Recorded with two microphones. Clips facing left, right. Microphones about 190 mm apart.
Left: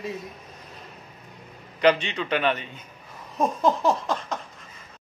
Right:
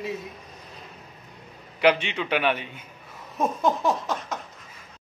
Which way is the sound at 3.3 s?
Centre (ahead or behind).